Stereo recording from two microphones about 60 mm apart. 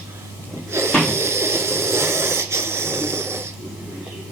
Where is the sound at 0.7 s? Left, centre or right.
Right.